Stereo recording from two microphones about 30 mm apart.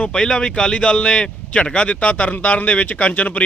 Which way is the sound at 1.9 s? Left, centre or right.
Left.